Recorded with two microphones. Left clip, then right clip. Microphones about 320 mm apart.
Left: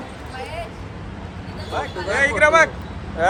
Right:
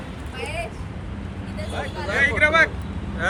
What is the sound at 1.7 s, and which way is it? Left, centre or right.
Speech, left.